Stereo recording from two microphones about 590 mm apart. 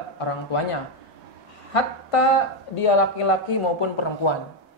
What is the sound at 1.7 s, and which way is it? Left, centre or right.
Speech, left.